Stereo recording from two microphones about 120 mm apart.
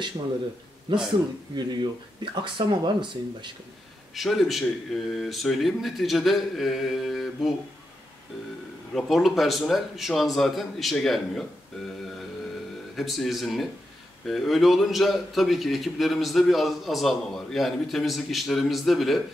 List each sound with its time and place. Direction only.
0.9 s speech: 40° right (ahead or behind)
4.1 s a man's voice: centre (ahead or behind)
8.9 s a man's voice: centre (ahead or behind)
12.9 s a man's voice: centre (ahead or behind)